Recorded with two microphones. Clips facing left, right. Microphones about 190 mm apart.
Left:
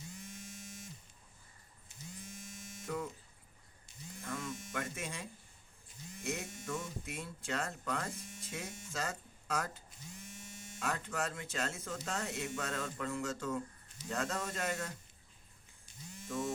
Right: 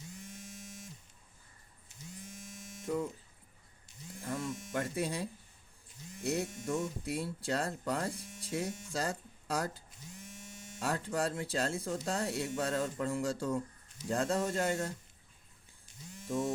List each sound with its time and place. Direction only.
2.8 s speech: 25° right (ahead or behind)
4.2 s speech: 30° right (ahead or behind)